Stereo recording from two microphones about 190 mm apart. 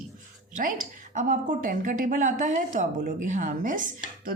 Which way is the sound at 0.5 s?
45° right (ahead or behind).